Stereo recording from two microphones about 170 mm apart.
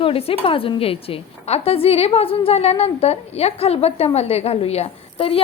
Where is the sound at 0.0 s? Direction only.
35° left (ahead or behind).